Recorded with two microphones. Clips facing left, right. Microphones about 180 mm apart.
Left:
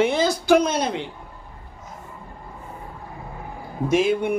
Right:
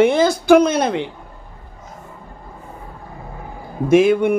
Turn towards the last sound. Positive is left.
turn(degrees=-55)  # may be behind; listen again after turning